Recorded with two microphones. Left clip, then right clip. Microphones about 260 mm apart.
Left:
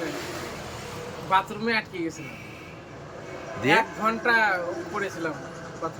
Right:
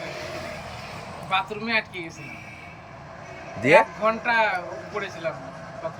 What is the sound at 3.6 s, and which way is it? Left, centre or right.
Speech, centre.